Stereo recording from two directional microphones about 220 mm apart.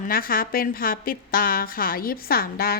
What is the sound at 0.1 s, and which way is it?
A woman's voice, 40° left (ahead or behind).